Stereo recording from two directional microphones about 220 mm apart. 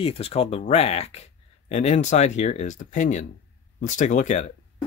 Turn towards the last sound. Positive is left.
turn(degrees=30)  # may be behind; listen again after turning